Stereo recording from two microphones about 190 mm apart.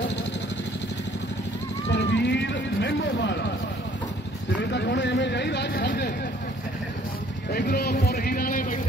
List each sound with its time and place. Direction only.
1.9 s a sound: 65° left (ahead or behind)
4.6 s speech: 65° left (ahead or behind)
7.5 s speech: 55° left (ahead or behind)